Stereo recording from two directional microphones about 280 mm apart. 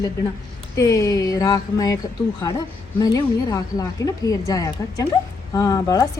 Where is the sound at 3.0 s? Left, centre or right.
Centre.